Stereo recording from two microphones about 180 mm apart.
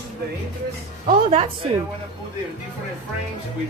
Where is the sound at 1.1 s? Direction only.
35° right (ahead or behind).